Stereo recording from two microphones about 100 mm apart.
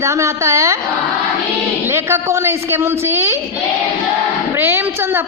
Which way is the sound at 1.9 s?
25° right (ahead or behind).